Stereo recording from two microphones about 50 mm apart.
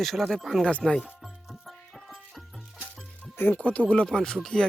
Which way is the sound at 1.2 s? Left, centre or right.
Centre.